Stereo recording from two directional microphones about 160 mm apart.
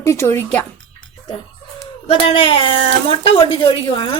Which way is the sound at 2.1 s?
35° left (ahead or behind).